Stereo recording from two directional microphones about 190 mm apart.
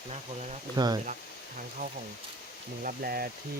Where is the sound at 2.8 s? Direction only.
50° right (ahead or behind).